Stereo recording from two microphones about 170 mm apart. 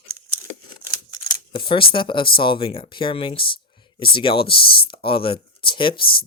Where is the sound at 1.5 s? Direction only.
30° left (ahead or behind).